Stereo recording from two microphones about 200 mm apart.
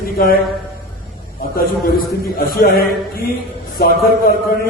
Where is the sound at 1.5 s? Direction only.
50° left (ahead or behind).